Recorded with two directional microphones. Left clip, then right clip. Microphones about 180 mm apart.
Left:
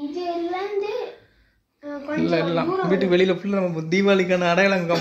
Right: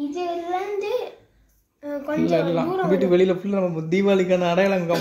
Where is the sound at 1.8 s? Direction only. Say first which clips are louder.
Right 3 dB; 55° right (ahead or behind).